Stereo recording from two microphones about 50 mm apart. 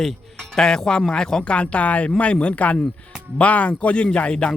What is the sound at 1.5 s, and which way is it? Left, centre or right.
A man's voice, left.